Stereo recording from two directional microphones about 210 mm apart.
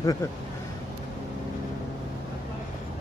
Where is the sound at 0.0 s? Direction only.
15° left (ahead or behind).